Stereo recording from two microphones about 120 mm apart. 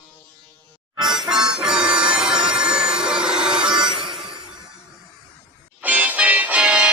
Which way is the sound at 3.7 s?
40° right (ahead or behind).